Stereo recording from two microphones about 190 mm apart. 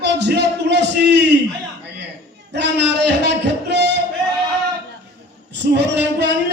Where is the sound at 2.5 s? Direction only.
65° right (ahead or behind).